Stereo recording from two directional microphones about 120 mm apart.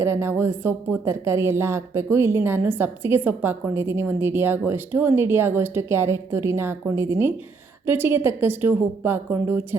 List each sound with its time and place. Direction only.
0.0 s a woman's voice: 20° right (ahead or behind)